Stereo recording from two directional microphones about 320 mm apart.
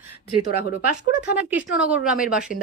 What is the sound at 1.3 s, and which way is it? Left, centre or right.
Speech, centre.